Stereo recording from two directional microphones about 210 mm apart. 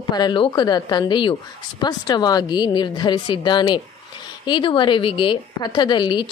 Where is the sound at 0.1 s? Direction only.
20° left (ahead or behind).